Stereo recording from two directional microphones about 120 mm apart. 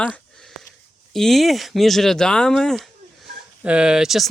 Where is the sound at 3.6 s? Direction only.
10° right (ahead or behind).